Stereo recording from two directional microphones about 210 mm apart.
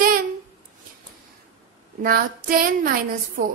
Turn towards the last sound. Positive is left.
turn(degrees=-45)  # may be behind; listen again after turning